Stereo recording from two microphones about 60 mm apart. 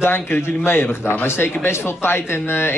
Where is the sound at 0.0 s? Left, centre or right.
Left.